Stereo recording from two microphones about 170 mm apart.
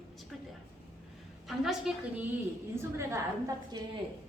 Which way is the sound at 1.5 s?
Centre (ahead or behind).